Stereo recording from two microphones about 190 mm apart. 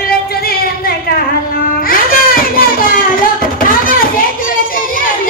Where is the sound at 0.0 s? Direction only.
55° left (ahead or behind).